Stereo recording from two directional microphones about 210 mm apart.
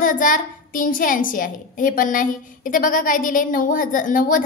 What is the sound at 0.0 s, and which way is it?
A woman's voice, 40° left (ahead or behind).